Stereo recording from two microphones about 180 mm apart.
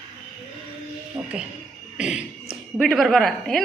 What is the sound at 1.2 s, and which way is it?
Music, 20° right (ahead or behind).